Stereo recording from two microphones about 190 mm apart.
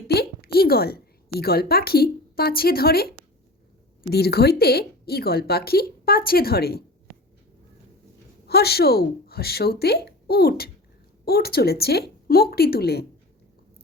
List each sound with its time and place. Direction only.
0.1 s a woman's voice: 55° left (ahead or behind)
8.4 s a woman's voice: 55° left (ahead or behind)